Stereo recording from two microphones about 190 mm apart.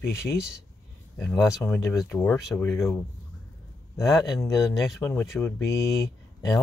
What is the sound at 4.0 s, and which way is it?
Speech, 20° left (ahead or behind).